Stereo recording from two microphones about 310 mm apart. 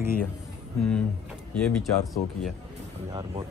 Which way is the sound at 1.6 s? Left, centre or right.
Centre.